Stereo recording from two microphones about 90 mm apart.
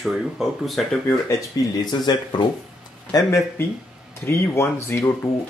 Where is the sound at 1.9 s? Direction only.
55° left (ahead or behind).